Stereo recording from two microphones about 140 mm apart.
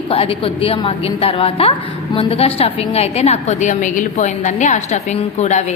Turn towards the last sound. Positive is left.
turn(degrees=55)  # may be behind; listen again after turning